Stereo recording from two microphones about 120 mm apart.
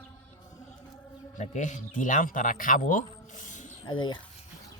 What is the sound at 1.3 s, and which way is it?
Speech, 85° left.